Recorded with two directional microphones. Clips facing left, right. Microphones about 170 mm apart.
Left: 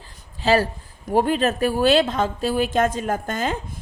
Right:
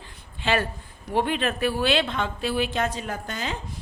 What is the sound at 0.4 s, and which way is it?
A woman's voice, 35° left (ahead or behind).